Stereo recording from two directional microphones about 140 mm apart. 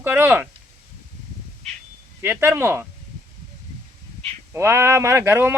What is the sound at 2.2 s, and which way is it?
Speech, 15° right (ahead or behind).